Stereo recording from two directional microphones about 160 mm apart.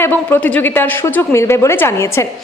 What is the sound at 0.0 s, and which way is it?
A woman's voice, 10° left (ahead or behind).